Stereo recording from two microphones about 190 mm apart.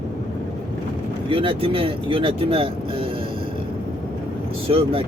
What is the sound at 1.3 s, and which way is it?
Speech, 30° right (ahead or behind).